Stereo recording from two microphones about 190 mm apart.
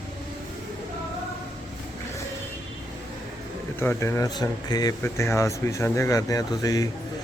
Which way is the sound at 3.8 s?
15° left (ahead or behind).